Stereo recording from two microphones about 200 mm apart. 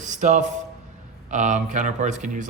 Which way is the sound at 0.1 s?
35° right (ahead or behind).